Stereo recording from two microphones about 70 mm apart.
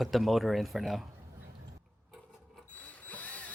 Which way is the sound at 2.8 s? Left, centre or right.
Left.